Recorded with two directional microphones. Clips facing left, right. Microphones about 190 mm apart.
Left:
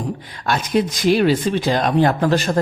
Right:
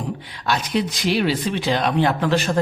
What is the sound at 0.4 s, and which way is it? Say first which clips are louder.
A man's voice: left 3 dB; 50° left (ahead or behind).